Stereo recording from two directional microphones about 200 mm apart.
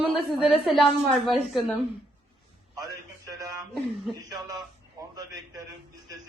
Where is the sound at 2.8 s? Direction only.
20° right (ahead or behind).